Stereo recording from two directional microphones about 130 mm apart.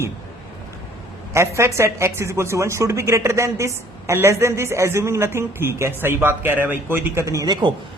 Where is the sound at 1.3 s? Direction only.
20° right (ahead or behind).